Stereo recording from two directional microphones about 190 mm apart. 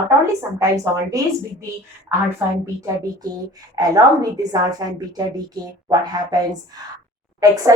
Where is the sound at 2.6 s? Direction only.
15° right (ahead or behind).